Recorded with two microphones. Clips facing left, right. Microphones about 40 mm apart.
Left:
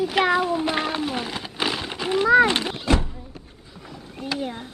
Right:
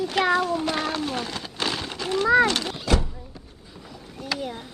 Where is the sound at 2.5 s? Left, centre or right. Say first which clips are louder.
Left 2 dB; left.